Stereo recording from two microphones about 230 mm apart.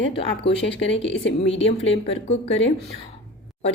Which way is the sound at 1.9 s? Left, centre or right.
Left.